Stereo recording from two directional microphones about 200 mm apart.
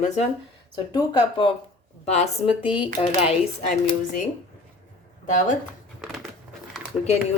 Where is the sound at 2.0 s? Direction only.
35° left (ahead or behind).